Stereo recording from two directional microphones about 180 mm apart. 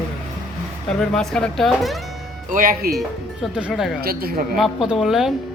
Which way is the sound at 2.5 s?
50° right (ahead or behind).